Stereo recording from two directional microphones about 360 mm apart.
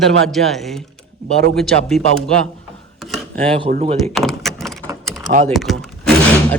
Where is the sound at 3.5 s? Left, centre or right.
Centre.